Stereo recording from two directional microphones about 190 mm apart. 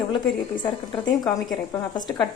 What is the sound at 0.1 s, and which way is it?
A woman's voice, 25° left (ahead or behind).